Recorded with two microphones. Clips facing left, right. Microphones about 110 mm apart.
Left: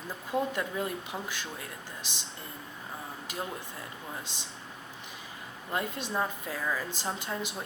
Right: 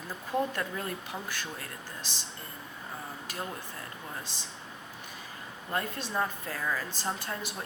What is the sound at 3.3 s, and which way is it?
Speech, 20° left (ahead or behind).